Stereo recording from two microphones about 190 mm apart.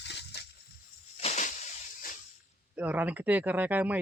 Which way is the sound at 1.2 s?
35° left (ahead or behind).